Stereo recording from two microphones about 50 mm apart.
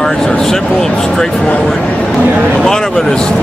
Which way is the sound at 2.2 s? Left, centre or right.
Right.